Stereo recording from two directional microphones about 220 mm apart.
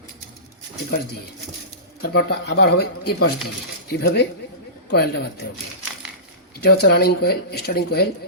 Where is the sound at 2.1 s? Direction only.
50° left (ahead or behind).